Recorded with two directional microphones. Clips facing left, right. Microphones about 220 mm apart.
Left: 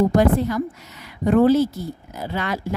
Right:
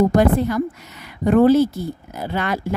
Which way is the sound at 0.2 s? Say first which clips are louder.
Right 1 dB; 60° right (ahead or behind).